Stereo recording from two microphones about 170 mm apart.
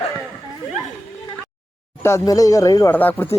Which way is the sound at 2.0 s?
20° left (ahead or behind).